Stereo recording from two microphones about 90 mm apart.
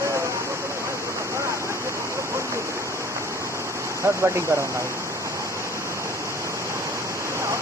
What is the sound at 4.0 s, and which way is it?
Speech, 30° right (ahead or behind).